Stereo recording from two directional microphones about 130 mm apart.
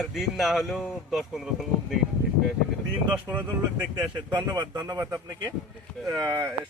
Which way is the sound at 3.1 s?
15° right (ahead or behind).